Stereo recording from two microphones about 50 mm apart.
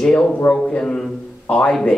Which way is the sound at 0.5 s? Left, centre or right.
Centre.